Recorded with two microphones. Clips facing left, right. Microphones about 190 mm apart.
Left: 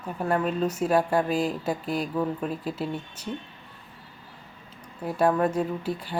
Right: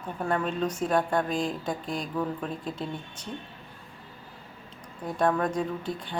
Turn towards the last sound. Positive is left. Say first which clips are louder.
# left 3 dB
turn(degrees=5)  # may be behind; listen again after turning